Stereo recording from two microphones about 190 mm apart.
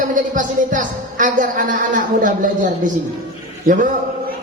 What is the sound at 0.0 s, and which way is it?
Speech, 45° right (ahead or behind).